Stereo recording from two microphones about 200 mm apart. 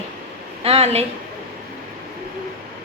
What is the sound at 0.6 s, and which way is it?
Speech, 30° right (ahead or behind).